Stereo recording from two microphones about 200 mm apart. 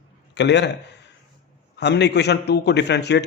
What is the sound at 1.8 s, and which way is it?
Speech, 60° left (ahead or behind).